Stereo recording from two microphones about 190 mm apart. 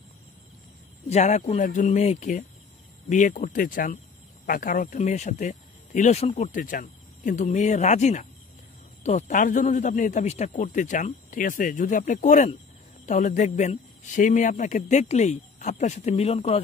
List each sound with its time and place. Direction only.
1.0 s speech: 35° left (ahead or behind)